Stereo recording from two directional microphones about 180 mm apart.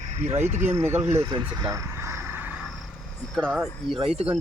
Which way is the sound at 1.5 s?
20° right (ahead or behind).